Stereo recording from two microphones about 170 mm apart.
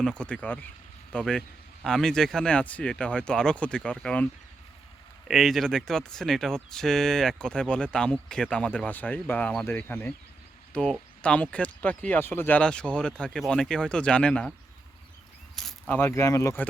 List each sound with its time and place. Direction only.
0.0 s speech: 5° left (ahead or behind)
5.3 s speech: centre (ahead or behind)
15.5 s a sound: 5° left (ahead or behind)
16.0 s speech: 15° left (ahead or behind)